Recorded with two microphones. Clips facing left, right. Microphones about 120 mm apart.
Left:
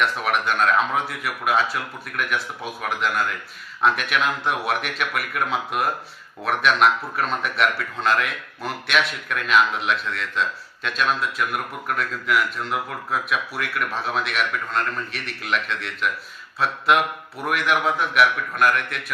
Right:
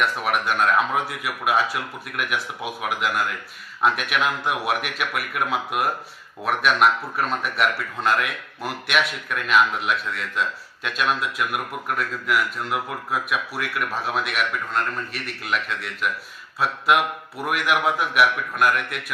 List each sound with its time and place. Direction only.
0.0 s a man's voice: 5° right (ahead or behind)